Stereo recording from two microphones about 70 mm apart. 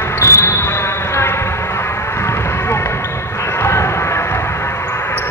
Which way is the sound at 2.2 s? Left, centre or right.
Left.